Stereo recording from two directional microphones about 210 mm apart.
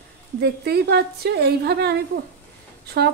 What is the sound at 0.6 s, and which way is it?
A woman's voice, 50° right (ahead or behind).